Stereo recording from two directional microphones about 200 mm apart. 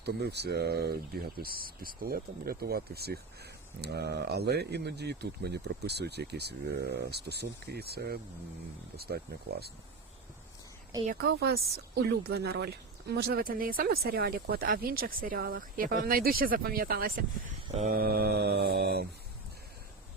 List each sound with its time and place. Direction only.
0.0 s speech: 55° right (ahead or behind)
11.2 s speech: 55° right (ahead or behind)